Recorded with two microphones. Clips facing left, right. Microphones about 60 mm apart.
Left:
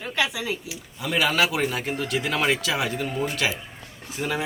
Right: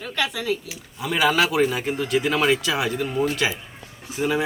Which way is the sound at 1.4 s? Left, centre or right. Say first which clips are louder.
Right 2 dB; centre.